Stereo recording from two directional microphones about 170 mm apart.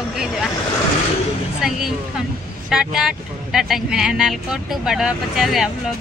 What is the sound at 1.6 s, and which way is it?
Speech, 5° right (ahead or behind).